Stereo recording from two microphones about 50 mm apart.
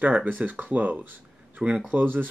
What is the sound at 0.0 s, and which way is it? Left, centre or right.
Speech, right.